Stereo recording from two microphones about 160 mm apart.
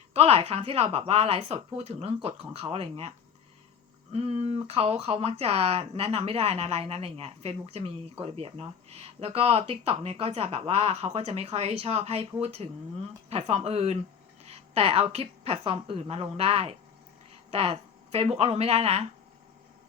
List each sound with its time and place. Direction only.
0.1 s speech: 40° right (ahead or behind)
4.1 s a woman's voice: 40° right (ahead or behind)